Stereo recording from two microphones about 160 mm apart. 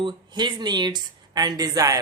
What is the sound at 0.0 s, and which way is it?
Speech, 30° right (ahead or behind).